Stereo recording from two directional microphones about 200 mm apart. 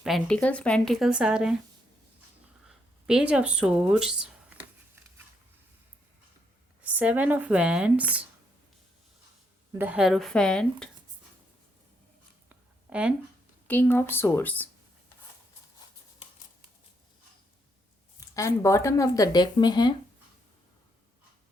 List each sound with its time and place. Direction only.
0.0 s speech: centre (ahead or behind)
2.6 s speech: 5° right (ahead or behind)
6.8 s speech: 10° right (ahead or behind)
9.7 s speech: 10° right (ahead or behind)
12.5 s a sound: 5° right (ahead or behind)
13.7 s speech: 10° left (ahead or behind)
18.2 s speech: 15° left (ahead or behind)